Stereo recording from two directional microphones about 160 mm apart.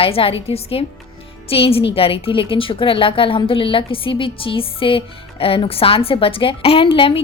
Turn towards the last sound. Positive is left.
turn(degrees=35)  # may be behind; listen again after turning